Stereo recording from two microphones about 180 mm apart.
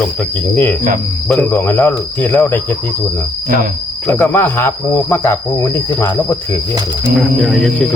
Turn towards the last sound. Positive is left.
turn(degrees=0)  # may be behind; listen again after turning